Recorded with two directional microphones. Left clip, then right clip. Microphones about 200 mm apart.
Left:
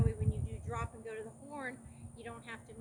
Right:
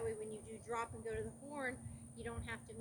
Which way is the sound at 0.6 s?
5° right (ahead or behind).